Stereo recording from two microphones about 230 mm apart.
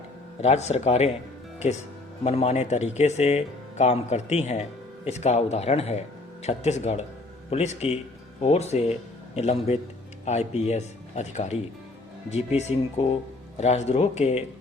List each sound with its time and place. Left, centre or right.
0.4 s speech: left
2.2 s speech: left